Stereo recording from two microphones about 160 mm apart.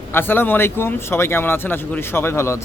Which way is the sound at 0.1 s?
15° left (ahead or behind).